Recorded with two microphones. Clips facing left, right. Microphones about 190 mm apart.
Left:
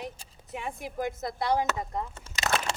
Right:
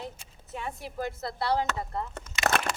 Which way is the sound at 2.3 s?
35° left (ahead or behind).